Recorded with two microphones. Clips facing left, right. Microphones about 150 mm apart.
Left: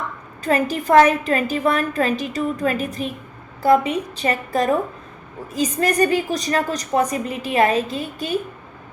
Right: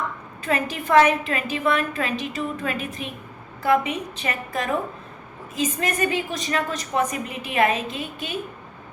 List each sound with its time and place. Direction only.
0.4 s a woman's voice: 35° left (ahead or behind)